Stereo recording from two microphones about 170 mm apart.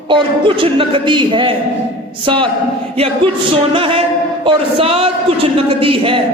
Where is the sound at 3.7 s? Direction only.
30° right (ahead or behind).